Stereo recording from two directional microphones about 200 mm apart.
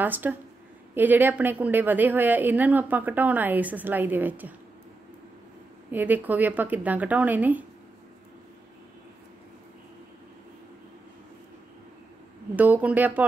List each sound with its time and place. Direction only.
0.0 s a woman's voice: 10° right (ahead or behind)
5.9 s a woman's voice: 10° right (ahead or behind)
12.5 s a woman's voice: 10° right (ahead or behind)